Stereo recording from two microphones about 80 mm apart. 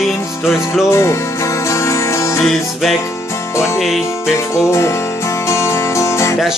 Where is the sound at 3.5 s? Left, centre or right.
Left.